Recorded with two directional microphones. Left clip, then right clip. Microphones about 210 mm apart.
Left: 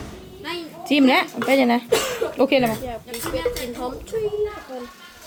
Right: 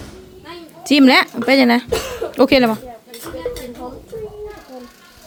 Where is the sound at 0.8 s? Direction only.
25° right (ahead or behind).